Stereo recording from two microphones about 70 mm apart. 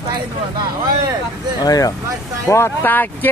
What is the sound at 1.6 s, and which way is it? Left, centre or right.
Speech, left.